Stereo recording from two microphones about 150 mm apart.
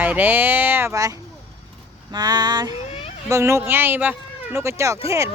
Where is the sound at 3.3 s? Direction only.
20° right (ahead or behind).